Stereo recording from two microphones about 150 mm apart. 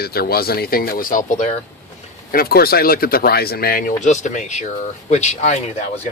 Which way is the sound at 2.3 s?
85° left.